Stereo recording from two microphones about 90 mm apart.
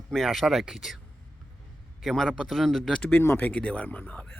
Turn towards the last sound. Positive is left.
turn(degrees=20)  # may be behind; listen again after turning